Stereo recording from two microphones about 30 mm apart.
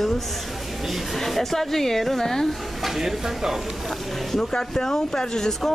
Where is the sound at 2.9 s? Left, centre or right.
Centre.